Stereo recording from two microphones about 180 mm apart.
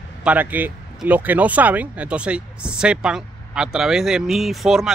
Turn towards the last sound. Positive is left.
turn(degrees=0)  # may be behind; listen again after turning